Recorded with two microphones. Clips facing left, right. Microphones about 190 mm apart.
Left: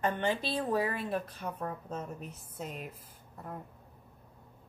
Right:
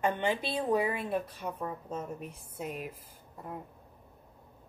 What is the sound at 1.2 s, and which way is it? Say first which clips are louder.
A woman's voice: right 2 dB; 10° right (ahead or behind).